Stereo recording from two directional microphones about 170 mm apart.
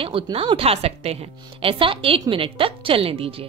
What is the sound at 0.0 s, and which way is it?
Speech, 30° right (ahead or behind).